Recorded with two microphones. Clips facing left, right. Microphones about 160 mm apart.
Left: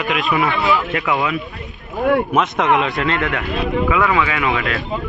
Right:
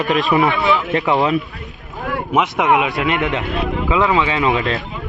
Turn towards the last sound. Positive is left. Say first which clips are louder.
# right 2 dB
turn(degrees=-30)  # may be behind; listen again after turning